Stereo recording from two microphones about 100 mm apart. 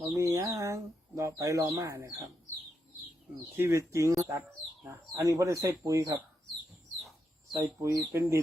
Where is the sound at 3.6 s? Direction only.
30° right (ahead or behind).